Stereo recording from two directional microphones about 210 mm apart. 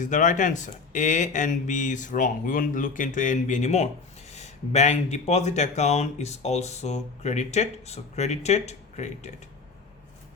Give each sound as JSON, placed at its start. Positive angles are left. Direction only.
{"t": 0.0, "sound": "speech", "side_deg": 35}